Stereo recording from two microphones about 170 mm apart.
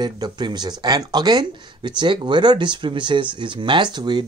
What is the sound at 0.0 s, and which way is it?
Speech, 25° right (ahead or behind).